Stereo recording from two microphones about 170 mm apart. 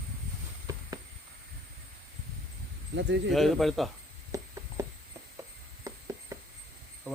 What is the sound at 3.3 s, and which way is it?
Speech, centre (ahead or behind).